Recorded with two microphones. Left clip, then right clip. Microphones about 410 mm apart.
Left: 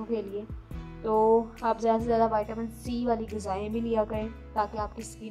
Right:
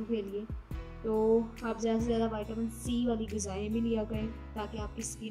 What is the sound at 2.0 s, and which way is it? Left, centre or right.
Music, left.